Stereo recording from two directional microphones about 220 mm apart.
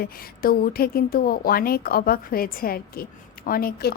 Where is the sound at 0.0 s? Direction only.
40° left (ahead or behind).